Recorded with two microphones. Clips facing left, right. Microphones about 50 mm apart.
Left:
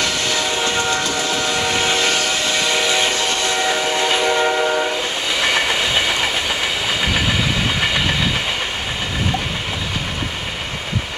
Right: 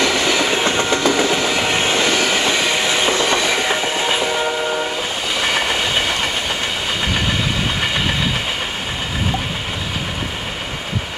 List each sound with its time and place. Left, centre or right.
0.0 s train: right
1.5 s vehicle: right
2.0 s train: right
2.5 s train: centre